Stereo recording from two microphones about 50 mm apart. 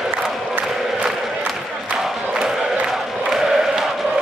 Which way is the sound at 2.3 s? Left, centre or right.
Centre.